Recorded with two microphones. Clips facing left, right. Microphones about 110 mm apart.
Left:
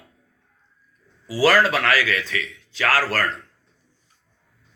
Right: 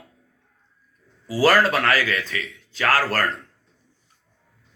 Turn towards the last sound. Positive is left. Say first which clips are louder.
# right 1 dB
turn(degrees=-45)  # may be behind; listen again after turning